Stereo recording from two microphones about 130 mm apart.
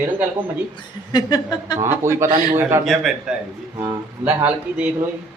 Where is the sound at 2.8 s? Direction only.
Centre (ahead or behind).